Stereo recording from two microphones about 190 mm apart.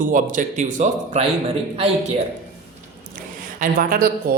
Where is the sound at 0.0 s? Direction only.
45° right (ahead or behind).